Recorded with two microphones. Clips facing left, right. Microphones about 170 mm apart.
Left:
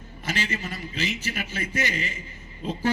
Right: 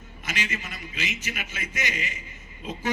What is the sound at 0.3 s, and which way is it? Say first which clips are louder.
A man's voice: left 4 dB; 35° left (ahead or behind).